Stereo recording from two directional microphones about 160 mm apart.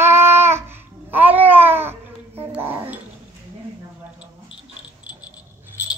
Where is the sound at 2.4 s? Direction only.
15° right (ahead or behind).